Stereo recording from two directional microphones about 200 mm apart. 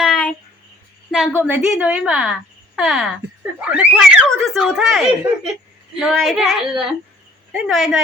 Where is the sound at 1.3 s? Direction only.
10° right (ahead or behind).